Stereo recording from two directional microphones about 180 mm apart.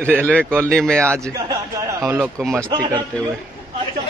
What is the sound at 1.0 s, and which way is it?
Speech, 15° right (ahead or behind).